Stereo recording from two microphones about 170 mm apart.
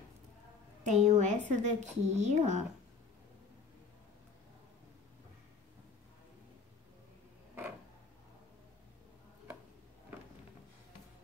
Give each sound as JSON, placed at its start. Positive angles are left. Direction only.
{"t": 0.8, "sound": "a woman's voice", "side_deg": -45}